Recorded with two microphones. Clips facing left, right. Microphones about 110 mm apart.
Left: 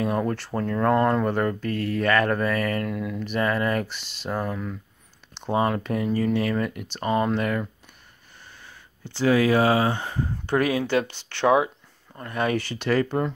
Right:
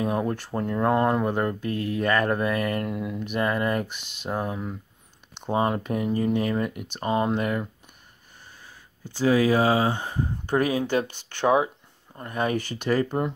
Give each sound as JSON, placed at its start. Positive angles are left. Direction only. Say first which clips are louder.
{"t": 0.0, "sound": "speech", "louder": "left 1 dB", "side_deg": -20}
{"t": 4.0, "sound": "speech", "louder": "left 1 dB", "side_deg": -55}
{"t": 4.3, "sound": "speech", "louder": "left 1 dB", "side_deg": -20}
{"t": 6.7, "sound": "speech", "louder": "even", "side_deg": -5}
{"t": 7.0, "sound": "speech", "louder": "left 1 dB", "side_deg": -25}
{"t": 9.0, "sound": "speech", "louder": "even", "side_deg": -10}
{"t": 9.3, "sound": "speech", "louder": "left 1 dB", "side_deg": -25}